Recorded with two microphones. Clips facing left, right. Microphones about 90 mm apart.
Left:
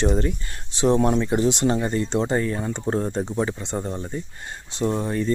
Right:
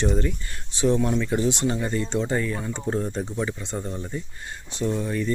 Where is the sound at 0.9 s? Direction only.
40° left (ahead or behind).